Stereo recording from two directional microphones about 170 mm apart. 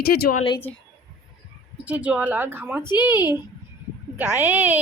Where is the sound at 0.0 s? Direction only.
65° left (ahead or behind).